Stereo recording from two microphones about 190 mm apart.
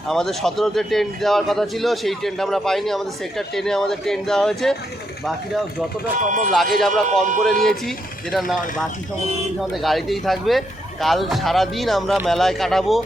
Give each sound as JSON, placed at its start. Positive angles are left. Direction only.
{"t": 0.1, "sound": "speech", "side_deg": 0}
{"t": 6.5, "sound": "speech", "side_deg": 0}
{"t": 7.1, "sound": "speech", "side_deg": -40}
{"t": 7.6, "sound": "speech", "side_deg": 0}
{"t": 9.6, "sound": "speech", "side_deg": 0}